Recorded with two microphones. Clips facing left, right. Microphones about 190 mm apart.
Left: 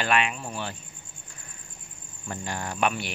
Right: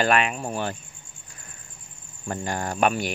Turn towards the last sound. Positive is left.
turn(degrees=-45)  # may be behind; listen again after turning